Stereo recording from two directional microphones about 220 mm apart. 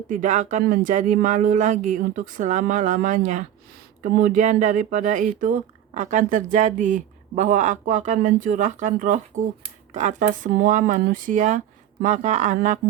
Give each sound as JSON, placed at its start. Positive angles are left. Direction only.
{"t": 0.1, "sound": "speech", "side_deg": -35}